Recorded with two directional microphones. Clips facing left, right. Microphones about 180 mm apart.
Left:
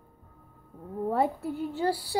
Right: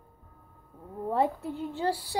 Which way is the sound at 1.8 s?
35° left (ahead or behind).